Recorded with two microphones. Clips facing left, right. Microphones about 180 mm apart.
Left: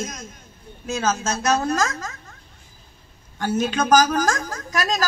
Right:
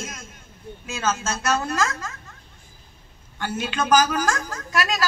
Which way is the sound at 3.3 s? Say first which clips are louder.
Left 5 dB; 40° left (ahead or behind).